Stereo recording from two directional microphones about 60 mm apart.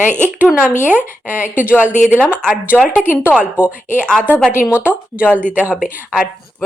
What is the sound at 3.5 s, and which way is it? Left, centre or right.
A woman's voice, right.